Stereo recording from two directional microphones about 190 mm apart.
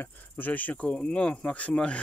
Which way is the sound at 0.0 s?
10° left (ahead or behind).